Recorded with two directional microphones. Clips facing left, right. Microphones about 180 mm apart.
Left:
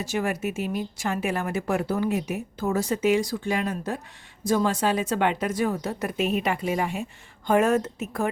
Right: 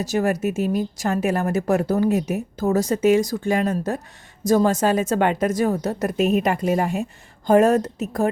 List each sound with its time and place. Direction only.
0.0 s a woman's voice: 40° right (ahead or behind)